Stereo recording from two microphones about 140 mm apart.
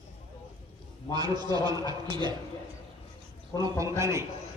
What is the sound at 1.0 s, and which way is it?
A man's voice, 30° right (ahead or behind).